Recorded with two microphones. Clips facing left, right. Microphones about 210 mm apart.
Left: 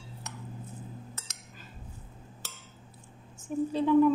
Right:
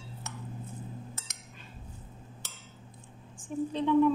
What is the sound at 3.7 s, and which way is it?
Speech, 5° left (ahead or behind).